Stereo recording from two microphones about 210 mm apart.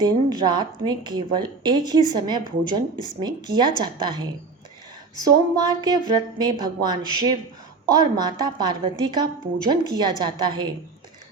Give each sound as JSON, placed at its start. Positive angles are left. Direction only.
{"t": 0.0, "sound": "speech", "side_deg": -20}